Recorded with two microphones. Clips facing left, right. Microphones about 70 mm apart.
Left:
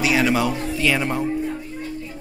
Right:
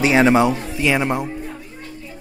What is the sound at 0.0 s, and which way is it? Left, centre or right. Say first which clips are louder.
Speech: right 5 dB; right.